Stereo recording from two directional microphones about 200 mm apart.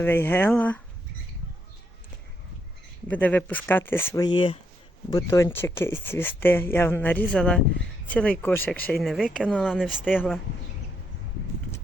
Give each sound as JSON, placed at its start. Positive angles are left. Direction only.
{"t": 0.0, "sound": "speech", "side_deg": 10}
{"t": 3.1, "sound": "speech", "side_deg": 10}